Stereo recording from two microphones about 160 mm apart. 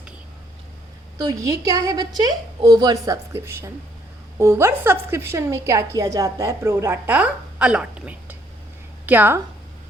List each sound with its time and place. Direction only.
1.3 s a woman's voice: 20° right (ahead or behind)